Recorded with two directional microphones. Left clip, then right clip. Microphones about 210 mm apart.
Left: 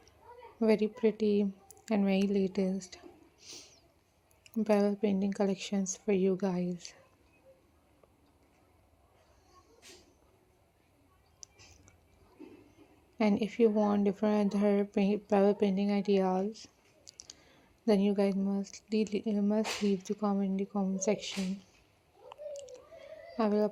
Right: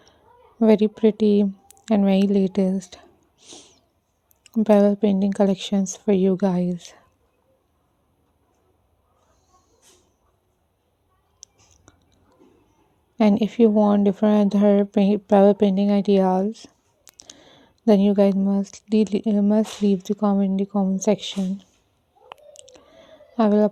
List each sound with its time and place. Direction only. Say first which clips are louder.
0.6 s a woman's voice: right 11 dB; 55° right (ahead or behind)
11.4 s a sound: right 5 dB; 55° right (ahead or behind)
11.9 s whispering: right 9 dB; 55° right (ahead or behind)
13.1 s speech: right 10 dB; 55° right (ahead or behind)
22.5 s clicking: left 2 dB; 55° right (ahead or behind)
23.4 s speech: right 11 dB; 55° right (ahead or behind)